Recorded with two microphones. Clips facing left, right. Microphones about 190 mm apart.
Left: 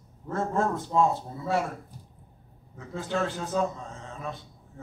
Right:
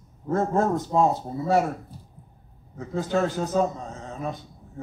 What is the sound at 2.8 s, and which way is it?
A man's voice, 40° right (ahead or behind).